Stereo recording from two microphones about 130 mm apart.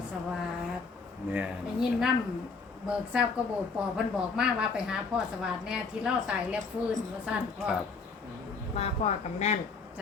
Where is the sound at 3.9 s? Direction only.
5° right (ahead or behind).